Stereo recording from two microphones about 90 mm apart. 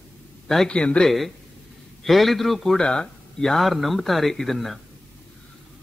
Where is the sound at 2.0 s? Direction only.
Centre (ahead or behind).